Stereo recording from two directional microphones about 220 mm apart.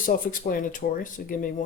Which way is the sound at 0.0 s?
40° left (ahead or behind).